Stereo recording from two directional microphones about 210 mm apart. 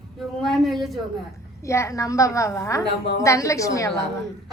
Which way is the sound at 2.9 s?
55° left (ahead or behind).